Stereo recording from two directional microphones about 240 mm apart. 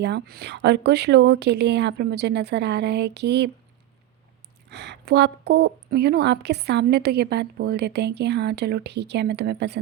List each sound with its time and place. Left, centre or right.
0.0 s speech: right
4.7 s speech: right